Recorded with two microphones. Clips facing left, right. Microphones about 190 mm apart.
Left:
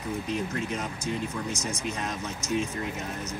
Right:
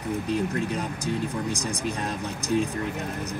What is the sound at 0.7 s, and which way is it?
Speech, 35° right (ahead or behind).